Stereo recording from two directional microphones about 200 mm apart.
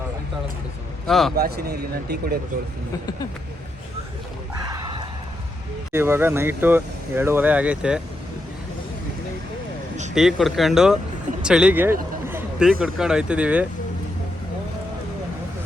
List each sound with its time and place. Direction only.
1.0 s speech: centre (ahead or behind)
1.4 s a man's voice: 50° right (ahead or behind)
4.6 s a sound: 20° right (ahead or behind)
5.9 s speech: 10° right (ahead or behind)
10.2 s speech: centre (ahead or behind)
12.3 s a sound: 5° right (ahead or behind)
12.8 s speech: 5° right (ahead or behind)